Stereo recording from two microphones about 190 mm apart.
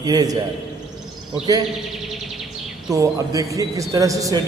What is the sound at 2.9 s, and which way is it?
A man's voice, 20° right (ahead or behind).